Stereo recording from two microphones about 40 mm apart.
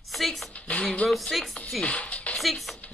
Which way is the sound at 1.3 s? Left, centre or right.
Centre.